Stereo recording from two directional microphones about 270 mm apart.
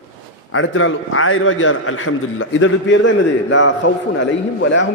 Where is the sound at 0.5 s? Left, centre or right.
Left.